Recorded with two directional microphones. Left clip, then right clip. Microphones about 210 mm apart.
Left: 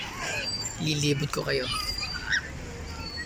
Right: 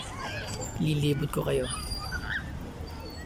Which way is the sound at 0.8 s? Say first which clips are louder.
Left 2 dB; 5° right (ahead or behind).